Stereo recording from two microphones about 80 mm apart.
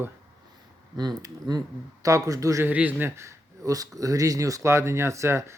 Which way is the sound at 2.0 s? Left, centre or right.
Right.